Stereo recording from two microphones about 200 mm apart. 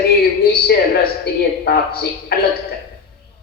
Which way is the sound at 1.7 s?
50° left (ahead or behind).